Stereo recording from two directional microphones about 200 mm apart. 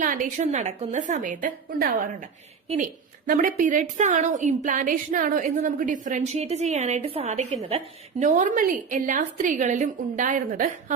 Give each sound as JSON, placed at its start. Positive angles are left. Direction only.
{"t": 0.0, "sound": "a woman's voice", "side_deg": -40}